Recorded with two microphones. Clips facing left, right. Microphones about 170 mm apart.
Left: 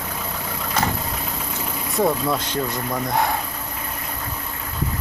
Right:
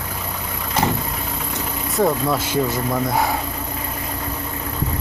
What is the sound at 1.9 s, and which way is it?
Speech, centre (ahead or behind).